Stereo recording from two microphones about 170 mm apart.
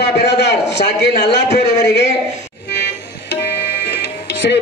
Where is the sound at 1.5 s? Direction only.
85° left.